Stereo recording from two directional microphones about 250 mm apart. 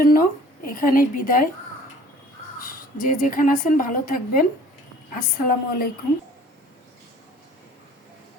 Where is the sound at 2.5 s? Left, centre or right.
Left.